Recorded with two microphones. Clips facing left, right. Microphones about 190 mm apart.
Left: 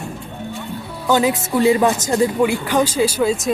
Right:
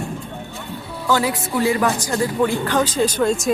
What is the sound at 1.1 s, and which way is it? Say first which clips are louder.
A woman's voice: left 3 dB; 20° left (ahead or behind).